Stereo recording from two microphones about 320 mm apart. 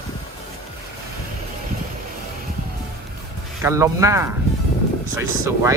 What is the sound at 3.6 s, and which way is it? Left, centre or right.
Speech, centre.